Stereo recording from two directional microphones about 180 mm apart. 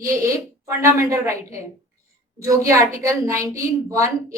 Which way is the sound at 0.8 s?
15° right (ahead or behind).